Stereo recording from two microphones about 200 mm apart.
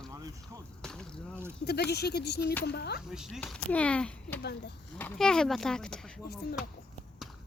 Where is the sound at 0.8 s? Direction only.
5° left (ahead or behind).